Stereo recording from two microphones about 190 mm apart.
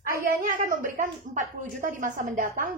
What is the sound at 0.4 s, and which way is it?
A woman's voice, 45° right (ahead or behind).